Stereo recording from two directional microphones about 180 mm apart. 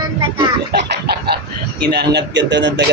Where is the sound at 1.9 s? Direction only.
65° right (ahead or behind).